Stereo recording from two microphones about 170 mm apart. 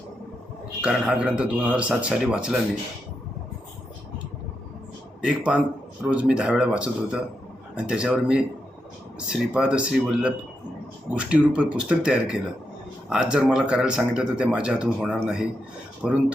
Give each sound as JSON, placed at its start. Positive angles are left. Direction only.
{"t": 0.8, "sound": "speech", "side_deg": -5}
{"t": 5.2, "sound": "speech", "side_deg": -5}